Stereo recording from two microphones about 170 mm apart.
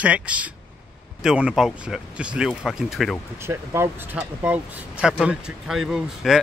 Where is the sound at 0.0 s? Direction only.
5° right (ahead or behind).